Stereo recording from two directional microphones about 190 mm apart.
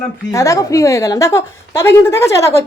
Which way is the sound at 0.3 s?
15° left (ahead or behind).